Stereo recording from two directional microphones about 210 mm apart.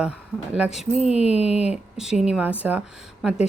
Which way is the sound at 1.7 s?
5° right (ahead or behind).